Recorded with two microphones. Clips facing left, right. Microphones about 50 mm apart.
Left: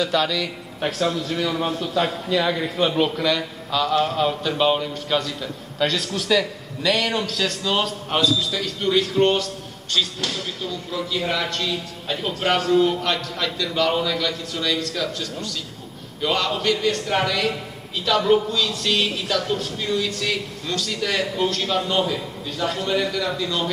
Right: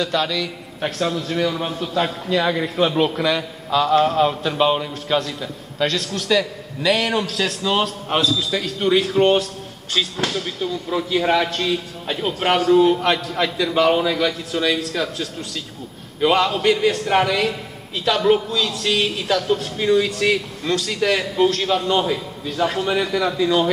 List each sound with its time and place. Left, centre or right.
0.0 s a man's voice: centre
8.5 s a man's voice: centre
16.2 s a man's voice: right
18.5 s a man's voice: centre
19.8 s a man's voice: right